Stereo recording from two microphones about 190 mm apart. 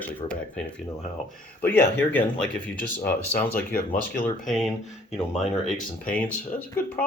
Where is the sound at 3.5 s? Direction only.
50° left (ahead or behind).